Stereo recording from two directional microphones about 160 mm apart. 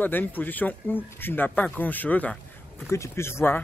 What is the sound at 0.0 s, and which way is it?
Speech, 10° left (ahead or behind).